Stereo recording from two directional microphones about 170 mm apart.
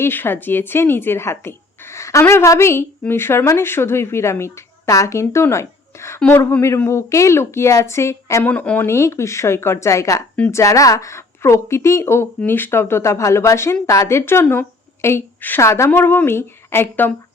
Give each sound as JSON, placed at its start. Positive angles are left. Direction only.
{"t": 0.0, "sound": "a woman's voice", "side_deg": 10}
{"t": 6.1, "sound": "a woman's voice", "side_deg": 5}